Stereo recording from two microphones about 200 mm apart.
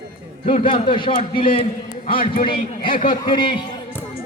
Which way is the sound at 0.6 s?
25° left (ahead or behind).